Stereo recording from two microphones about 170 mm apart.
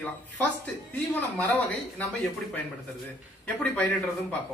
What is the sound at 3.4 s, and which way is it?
Speech, 10° left (ahead or behind).